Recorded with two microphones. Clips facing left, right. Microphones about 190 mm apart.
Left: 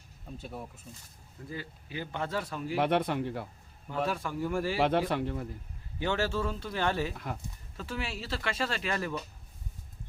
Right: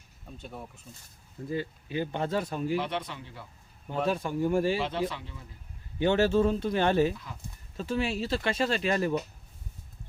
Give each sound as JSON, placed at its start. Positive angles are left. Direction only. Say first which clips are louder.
{"t": 0.3, "sound": "speech", "louder": "left 1 dB", "side_deg": 5}
{"t": 1.5, "sound": "speech", "louder": "right 8 dB", "side_deg": -25}
{"t": 2.7, "sound": "speech", "louder": "left 4 dB", "side_deg": 55}
{"t": 3.8, "sound": "speech", "louder": "right 3 dB", "side_deg": -25}
{"t": 4.8, "sound": "speech", "louder": "left 4 dB", "side_deg": 55}
{"t": 6.0, "sound": "speech", "louder": "right 7 dB", "side_deg": -20}